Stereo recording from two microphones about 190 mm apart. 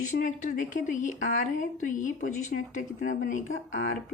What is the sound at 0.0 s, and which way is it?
A woman's voice, 40° left (ahead or behind).